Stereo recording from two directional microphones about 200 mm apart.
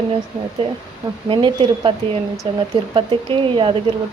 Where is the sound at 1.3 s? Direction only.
25° right (ahead or behind).